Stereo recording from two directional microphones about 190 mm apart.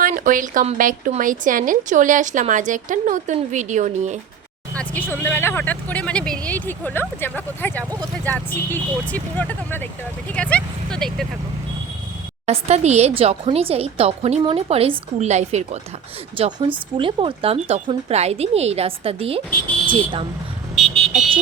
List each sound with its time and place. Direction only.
0.0 s speech: 45° right (ahead or behind)
4.7 s speech: 10° left (ahead or behind)
12.5 s speech: 35° right (ahead or behind)
20.7 s vehicle: centre (ahead or behind)